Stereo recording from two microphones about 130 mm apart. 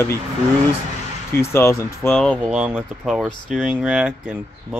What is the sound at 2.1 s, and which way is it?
Speech, 5° left (ahead or behind).